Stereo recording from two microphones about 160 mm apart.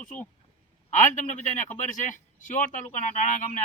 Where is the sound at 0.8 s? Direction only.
50° left (ahead or behind).